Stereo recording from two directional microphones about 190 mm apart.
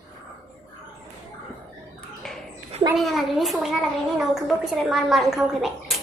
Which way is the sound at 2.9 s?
Centre (ahead or behind).